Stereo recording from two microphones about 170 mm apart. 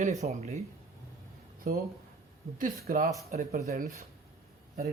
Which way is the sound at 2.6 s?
55° right (ahead or behind).